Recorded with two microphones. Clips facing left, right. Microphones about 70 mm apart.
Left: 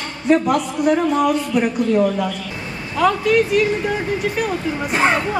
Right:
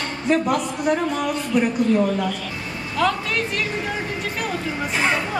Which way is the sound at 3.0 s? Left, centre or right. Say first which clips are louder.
Left 6 dB; centre.